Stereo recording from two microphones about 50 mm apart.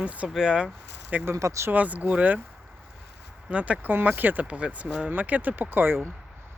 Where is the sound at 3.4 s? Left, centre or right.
Right.